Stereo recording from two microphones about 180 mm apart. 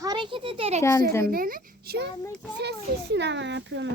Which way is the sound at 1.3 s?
50° right (ahead or behind).